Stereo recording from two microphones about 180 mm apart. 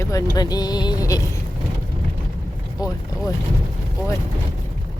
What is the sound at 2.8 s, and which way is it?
Speech, 20° left (ahead or behind).